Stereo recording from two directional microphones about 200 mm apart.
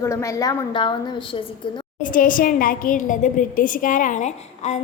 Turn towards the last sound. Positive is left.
turn(degrees=35)  # may be behind; listen again after turning